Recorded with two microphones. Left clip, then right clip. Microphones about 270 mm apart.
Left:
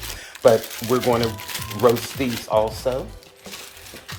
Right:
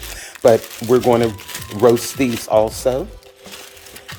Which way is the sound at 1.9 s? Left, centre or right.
Right.